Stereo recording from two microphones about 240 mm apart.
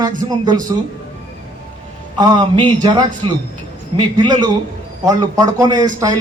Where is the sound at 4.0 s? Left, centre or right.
Centre.